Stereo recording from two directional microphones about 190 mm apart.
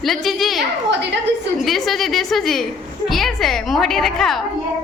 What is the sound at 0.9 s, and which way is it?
Speech, 65° right (ahead or behind).